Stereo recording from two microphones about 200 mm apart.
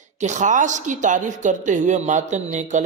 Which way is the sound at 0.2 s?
35° right (ahead or behind).